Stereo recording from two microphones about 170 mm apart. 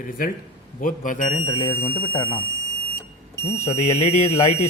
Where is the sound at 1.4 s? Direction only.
30° left (ahead or behind).